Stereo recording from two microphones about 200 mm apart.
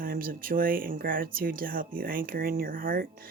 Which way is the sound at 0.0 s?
45° right (ahead or behind).